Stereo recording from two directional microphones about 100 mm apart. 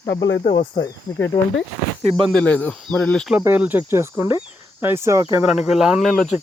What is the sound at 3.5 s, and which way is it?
Cricket, 20° right (ahead or behind).